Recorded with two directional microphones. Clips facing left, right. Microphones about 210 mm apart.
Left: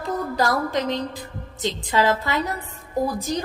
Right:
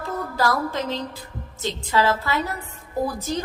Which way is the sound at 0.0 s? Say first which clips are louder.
Left 1 dB; 15° left (ahead or behind).